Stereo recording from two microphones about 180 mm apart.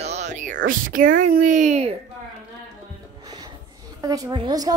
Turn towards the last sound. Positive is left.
turn(degrees=-20)  # may be behind; listen again after turning